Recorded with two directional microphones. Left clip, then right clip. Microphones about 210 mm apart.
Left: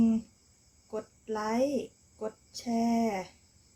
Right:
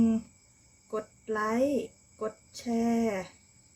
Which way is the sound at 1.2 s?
Centre (ahead or behind).